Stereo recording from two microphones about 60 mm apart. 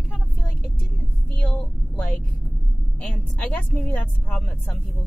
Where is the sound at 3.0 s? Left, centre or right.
Left.